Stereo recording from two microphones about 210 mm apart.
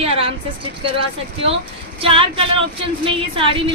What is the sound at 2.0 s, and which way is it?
Speech, 25° right (ahead or behind).